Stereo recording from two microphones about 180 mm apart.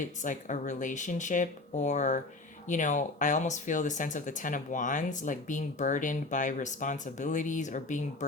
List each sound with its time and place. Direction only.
0.0 s speech: 45° left (ahead or behind)